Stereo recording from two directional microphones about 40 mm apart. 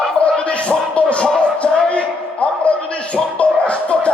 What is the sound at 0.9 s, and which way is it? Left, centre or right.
Music, left.